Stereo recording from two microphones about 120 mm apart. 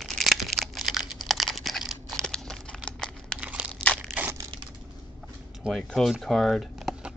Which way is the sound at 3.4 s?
10° right (ahead or behind).